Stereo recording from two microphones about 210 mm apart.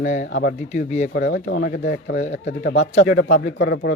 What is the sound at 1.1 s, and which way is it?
Speech, 55° left (ahead or behind).